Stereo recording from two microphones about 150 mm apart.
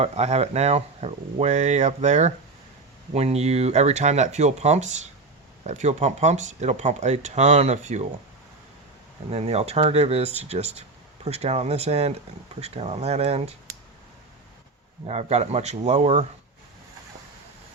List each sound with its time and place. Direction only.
0.0 s speech: 45° right (ahead or behind)
9.3 s speech: 45° right (ahead or behind)
15.0 s speech: 45° right (ahead or behind)